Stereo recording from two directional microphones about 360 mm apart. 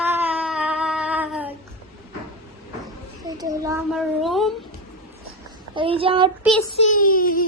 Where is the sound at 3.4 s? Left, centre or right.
Centre.